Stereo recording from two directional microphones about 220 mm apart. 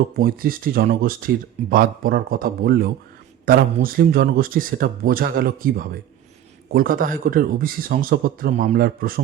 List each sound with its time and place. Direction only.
0.2 s speech: 40° right (ahead or behind)